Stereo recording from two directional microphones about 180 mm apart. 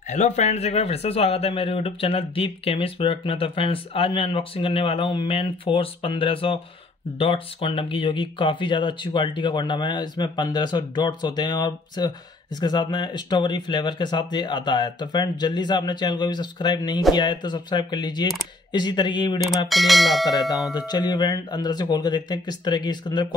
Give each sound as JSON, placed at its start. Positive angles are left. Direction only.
{"t": 0.1, "sound": "speech", "side_deg": 40}
{"t": 19.7, "sound": "speech", "side_deg": 0}
{"t": 20.2, "sound": "speech", "side_deg": 20}